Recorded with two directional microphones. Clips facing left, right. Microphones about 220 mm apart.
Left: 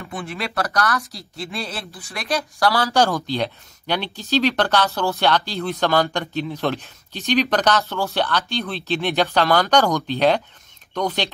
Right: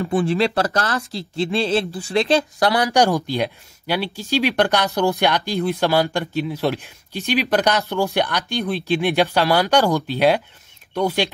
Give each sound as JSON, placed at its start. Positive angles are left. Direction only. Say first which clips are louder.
{"t": 0.0, "sound": "speech", "louder": "right 11 dB", "side_deg": -30}